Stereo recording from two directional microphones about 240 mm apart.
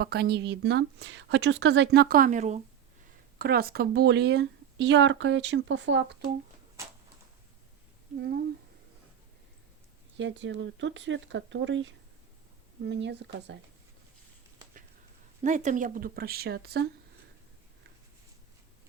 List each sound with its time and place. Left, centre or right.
0.0 s speech: right
8.2 s speech: right
10.2 s speech: right
15.4 s speech: right